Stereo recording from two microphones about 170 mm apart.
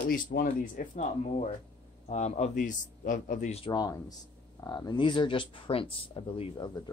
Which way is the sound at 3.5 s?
30° left (ahead or behind).